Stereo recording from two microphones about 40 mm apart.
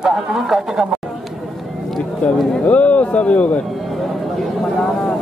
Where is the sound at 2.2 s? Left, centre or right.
Left.